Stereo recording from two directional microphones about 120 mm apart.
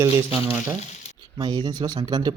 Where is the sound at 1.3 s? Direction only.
35° right (ahead or behind).